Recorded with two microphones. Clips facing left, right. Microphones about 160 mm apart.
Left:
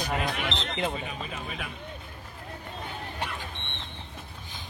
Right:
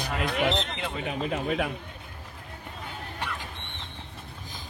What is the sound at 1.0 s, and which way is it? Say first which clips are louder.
Speech: right 7 dB; 65° right (ahead or behind).